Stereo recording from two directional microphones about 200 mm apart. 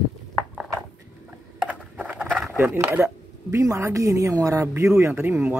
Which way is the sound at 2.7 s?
10° right (ahead or behind).